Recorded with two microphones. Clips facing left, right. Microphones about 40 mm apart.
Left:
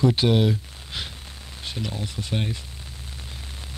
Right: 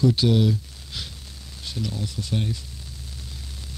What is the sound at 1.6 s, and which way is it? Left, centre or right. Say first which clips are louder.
Speech: right 1 dB; left.